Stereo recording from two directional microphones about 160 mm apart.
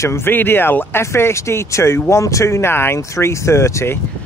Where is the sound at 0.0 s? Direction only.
15° left (ahead or behind).